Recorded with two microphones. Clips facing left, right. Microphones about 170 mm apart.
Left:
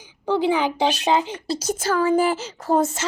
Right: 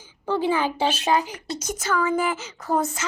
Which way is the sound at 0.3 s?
15° left (ahead or behind).